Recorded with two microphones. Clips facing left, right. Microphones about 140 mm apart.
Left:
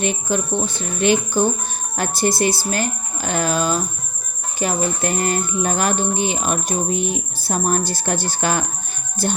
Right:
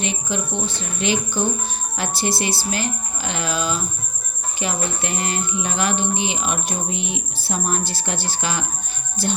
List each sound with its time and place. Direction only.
0.0 s music: 45° left (ahead or behind)